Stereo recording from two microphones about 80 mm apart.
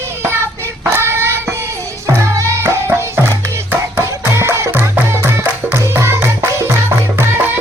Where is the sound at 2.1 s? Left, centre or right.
Right.